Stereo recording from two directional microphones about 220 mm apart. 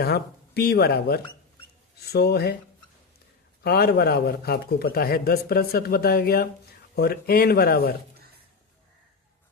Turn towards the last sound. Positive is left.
turn(degrees=45)  # may be behind; listen again after turning